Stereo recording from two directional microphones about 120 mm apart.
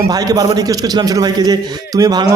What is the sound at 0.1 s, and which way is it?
A man's voice, 30° right (ahead or behind).